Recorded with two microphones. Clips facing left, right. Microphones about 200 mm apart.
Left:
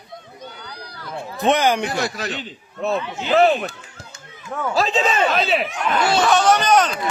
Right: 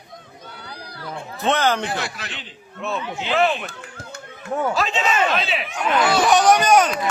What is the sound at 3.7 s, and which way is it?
Run, 55° right (ahead or behind).